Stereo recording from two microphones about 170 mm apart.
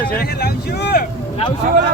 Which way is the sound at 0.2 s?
70° left (ahead or behind).